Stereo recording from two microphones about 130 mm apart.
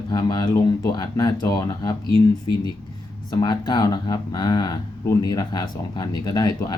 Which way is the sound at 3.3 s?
30° left (ahead or behind).